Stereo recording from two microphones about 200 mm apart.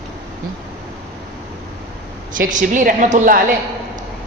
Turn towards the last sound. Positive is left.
turn(degrees=-40)  # may be behind; listen again after turning